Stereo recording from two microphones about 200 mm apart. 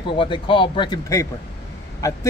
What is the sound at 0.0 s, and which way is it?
A man's voice, 25° left (ahead or behind).